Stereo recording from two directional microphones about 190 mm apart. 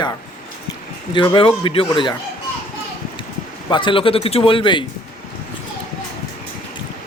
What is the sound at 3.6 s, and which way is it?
A man's voice, 25° left (ahead or behind).